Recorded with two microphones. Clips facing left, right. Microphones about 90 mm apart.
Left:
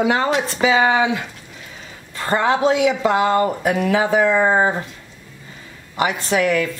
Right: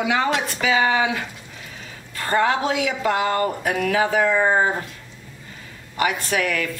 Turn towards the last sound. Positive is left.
turn(degrees=25)  # may be behind; listen again after turning